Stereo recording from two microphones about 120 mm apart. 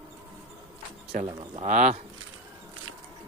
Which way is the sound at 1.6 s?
80° right.